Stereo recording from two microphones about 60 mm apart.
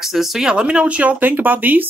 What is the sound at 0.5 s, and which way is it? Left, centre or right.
Speech, centre.